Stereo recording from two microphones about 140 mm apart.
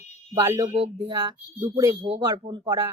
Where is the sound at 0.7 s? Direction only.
50° right (ahead or behind).